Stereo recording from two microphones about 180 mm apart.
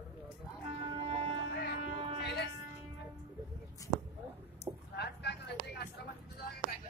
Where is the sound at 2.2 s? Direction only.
70° left (ahead or behind).